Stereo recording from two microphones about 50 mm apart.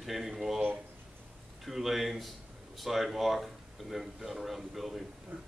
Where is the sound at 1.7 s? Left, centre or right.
Centre.